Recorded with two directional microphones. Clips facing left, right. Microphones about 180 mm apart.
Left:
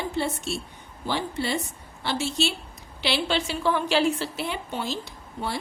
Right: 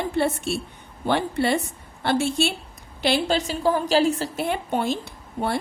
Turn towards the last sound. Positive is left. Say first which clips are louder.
# right 6 dB
turn(degrees=-55)  # may be behind; listen again after turning